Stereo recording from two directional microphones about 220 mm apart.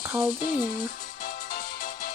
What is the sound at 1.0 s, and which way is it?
Music, 40° left (ahead or behind).